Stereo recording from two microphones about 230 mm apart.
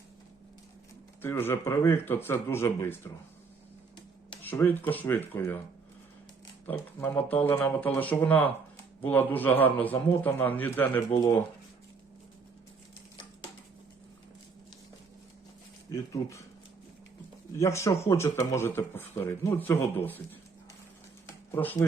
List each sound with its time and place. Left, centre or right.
1.2 s speech: centre
4.4 s speech: centre
6.7 s speech: centre
15.9 s speech: centre
17.5 s speech: centre
21.5 s speech: centre